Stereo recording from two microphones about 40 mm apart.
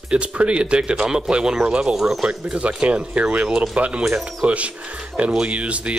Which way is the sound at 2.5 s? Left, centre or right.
Right.